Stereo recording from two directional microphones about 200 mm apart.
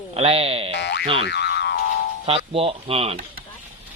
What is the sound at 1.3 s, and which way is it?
Boing, 55° left (ahead or behind).